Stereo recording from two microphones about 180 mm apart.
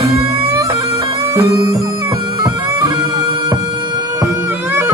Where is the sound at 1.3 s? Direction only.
20° right (ahead or behind).